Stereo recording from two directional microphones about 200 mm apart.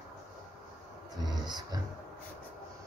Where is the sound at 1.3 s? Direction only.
20° right (ahead or behind).